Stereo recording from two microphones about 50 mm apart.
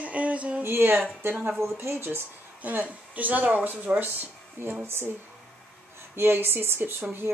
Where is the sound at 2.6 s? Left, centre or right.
Right.